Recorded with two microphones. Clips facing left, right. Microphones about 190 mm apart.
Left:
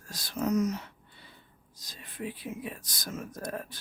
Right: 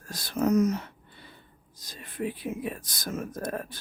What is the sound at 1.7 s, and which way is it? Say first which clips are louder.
Speech: right 6 dB; 55° right (ahead or behind).